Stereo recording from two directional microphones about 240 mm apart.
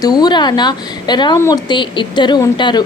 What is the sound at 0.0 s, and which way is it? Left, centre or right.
A woman's voice, centre.